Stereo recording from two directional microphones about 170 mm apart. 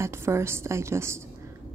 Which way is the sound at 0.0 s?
15° right (ahead or behind).